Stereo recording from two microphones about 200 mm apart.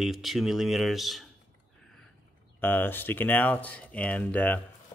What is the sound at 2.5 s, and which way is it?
Speech, 10° left (ahead or behind).